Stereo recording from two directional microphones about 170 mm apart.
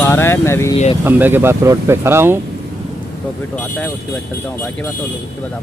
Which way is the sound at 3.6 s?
10° left (ahead or behind).